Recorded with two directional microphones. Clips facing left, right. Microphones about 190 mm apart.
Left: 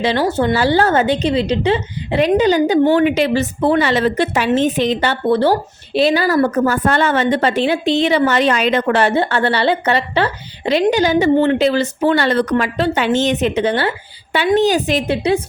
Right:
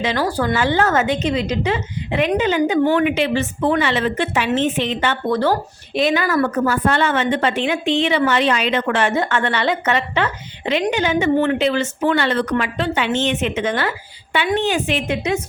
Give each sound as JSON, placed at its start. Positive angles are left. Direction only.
{"t": 0.0, "sound": "speech", "side_deg": 30}
{"t": 0.6, "sound": "a woman's voice", "side_deg": 35}